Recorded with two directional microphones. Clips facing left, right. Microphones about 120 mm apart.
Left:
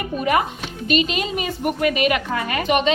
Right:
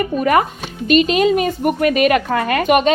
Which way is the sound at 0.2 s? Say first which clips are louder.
Right 3 dB; 45° right (ahead or behind).